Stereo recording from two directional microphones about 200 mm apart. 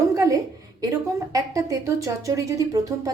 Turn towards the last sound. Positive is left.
turn(degrees=-15)  # may be behind; listen again after turning